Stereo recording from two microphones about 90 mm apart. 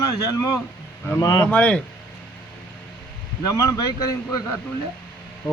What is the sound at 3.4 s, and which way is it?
Speech, 40° left (ahead or behind).